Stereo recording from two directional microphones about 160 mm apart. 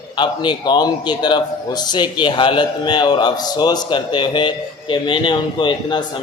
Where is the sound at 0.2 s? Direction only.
30° left (ahead or behind).